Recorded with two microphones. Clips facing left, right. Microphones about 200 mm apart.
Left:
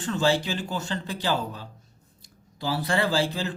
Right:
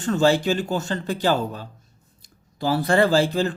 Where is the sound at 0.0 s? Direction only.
45° right (ahead or behind).